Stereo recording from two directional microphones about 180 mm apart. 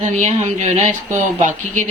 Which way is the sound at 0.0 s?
40° right (ahead or behind).